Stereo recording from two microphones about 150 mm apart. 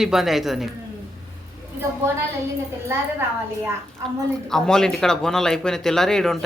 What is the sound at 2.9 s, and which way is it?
Speech, 15° right (ahead or behind).